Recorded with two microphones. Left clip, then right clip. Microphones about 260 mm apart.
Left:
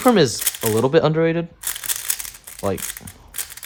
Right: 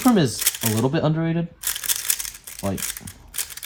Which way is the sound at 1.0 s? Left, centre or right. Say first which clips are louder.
Left 7 dB; right.